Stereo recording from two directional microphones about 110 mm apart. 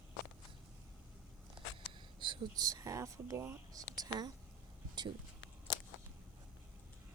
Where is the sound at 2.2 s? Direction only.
45° right (ahead or behind).